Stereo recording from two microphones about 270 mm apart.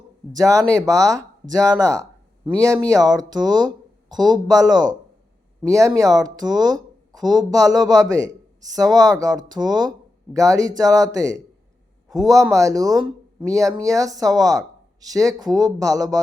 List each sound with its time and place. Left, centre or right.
0.3 s speech: centre